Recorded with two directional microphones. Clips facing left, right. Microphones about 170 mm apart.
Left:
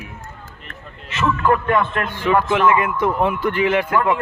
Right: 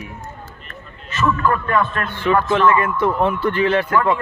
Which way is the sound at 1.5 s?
15° left (ahead or behind).